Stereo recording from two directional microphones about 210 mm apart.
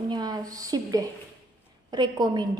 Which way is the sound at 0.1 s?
20° right (ahead or behind).